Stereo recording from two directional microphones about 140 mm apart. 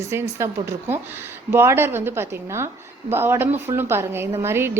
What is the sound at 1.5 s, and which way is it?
A woman's voice, 15° right (ahead or behind).